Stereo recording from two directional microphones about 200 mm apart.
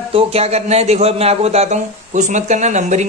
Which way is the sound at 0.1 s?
30° right (ahead or behind).